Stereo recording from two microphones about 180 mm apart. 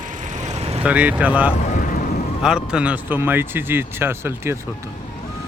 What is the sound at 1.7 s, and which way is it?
Vehicle, 50° left (ahead or behind).